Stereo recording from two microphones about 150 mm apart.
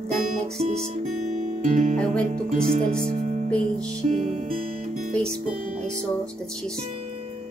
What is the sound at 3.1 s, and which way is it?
Music, 50° right (ahead or behind).